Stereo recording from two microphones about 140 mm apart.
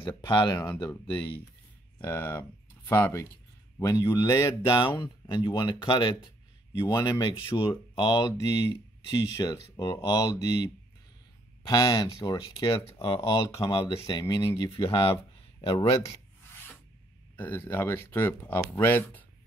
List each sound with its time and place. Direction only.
0.0 s speech: 35° left (ahead or behind)
2.0 s speech: 15° left (ahead or behind); by 14.2 s 35° left (ahead or behind)
14.2 s speech: 20° left (ahead or behind); by 16.0 s 40° left (ahead or behind)
17.4 s speech: 15° left (ahead or behind)